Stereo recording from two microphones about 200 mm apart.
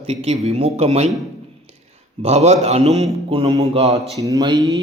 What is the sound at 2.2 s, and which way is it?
A man's voice, 35° right (ahead or behind).